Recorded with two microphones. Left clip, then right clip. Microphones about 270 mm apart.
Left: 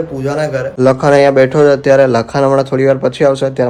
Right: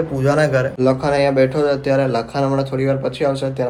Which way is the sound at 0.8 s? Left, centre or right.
Left.